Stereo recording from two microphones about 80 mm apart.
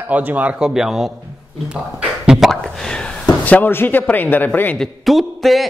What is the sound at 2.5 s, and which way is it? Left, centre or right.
Speech, centre.